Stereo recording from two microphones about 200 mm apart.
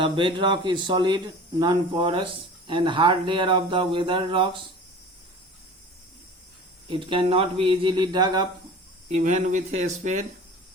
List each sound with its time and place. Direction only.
0.0 s speech: 25° right (ahead or behind)
6.8 s speech: 25° right (ahead or behind)
9.1 s speech: 35° right (ahead or behind)